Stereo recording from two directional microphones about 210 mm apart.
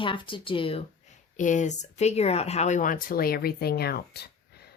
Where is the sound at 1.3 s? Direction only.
35° left (ahead or behind).